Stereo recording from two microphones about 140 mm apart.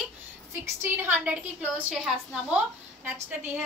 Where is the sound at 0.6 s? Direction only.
15° right (ahead or behind).